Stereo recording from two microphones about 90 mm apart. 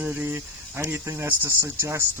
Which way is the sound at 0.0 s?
20° right (ahead or behind).